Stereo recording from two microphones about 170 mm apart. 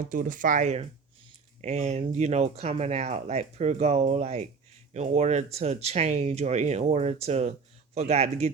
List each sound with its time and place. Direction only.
0.0 s speech: 50° right (ahead or behind)